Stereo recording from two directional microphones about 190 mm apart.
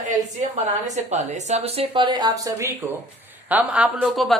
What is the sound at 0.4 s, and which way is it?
Speech, 35° right (ahead or behind).